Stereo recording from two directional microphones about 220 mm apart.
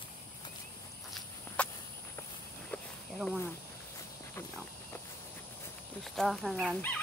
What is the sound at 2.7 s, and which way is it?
Snake, centre (ahead or behind).